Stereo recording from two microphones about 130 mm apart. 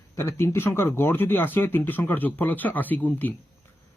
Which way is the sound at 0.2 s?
20° left (ahead or behind).